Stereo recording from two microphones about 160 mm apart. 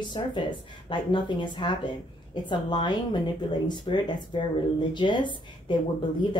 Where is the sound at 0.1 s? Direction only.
30° left (ahead or behind).